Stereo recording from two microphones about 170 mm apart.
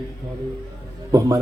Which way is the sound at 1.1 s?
20° right (ahead or behind).